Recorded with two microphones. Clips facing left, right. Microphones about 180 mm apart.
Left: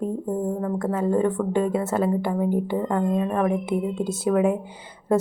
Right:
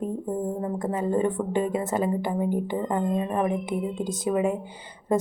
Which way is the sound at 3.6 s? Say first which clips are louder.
Left 3 dB; 5° left (ahead or behind).